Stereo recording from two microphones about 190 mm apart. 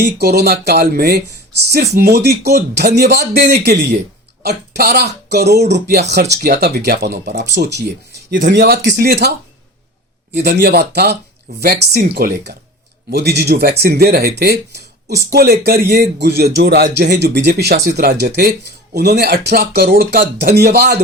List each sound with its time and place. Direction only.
0.0 s speech: 60° right (ahead or behind)
4.4 s speech: 60° right (ahead or behind)
10.3 s speech: 60° right (ahead or behind)